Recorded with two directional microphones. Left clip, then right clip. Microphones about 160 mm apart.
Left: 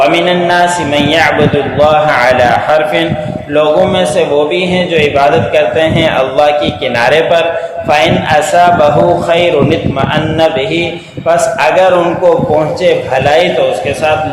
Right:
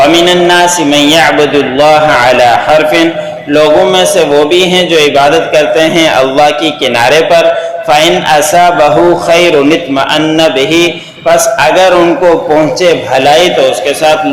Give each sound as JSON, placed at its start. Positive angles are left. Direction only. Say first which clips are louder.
{"t": 0.1, "sound": "a man's voice", "louder": "right 4 dB", "side_deg": -35}
{"t": 7.9, "sound": "a man's voice", "louder": "right 3 dB", "side_deg": -35}
{"t": 11.6, "sound": "a man's voice", "louder": "right 2 dB", "side_deg": -25}